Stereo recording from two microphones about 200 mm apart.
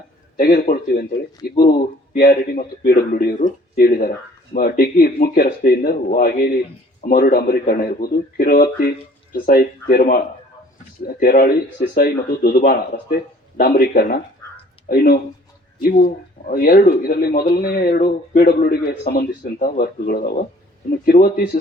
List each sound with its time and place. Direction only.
0.3 s speech: 50° left (ahead or behind)